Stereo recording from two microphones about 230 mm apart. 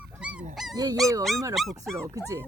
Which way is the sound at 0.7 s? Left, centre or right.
Centre.